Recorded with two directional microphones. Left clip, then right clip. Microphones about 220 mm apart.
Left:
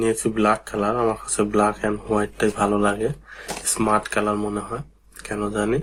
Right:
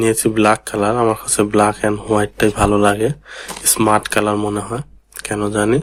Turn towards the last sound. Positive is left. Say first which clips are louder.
# right 7 dB
turn(degrees=-45)  # may be behind; listen again after turning